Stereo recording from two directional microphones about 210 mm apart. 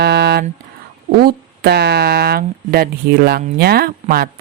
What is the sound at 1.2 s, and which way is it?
Speech, 50° right (ahead or behind).